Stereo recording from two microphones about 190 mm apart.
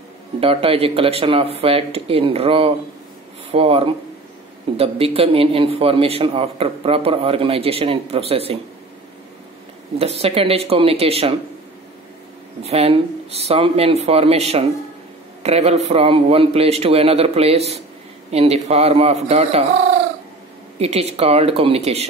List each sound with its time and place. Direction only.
0.4 s a man's voice: 30° right (ahead or behind)
9.9 s a man's voice: 30° right (ahead or behind)
12.6 s a man's voice: 30° right (ahead or behind)
20.8 s a man's voice: 35° right (ahead or behind)